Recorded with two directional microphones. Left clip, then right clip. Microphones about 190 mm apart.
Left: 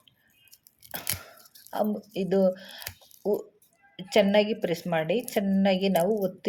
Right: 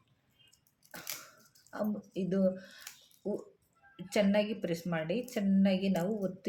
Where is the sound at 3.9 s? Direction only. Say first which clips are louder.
Left 8 dB; 15° left (ahead or behind).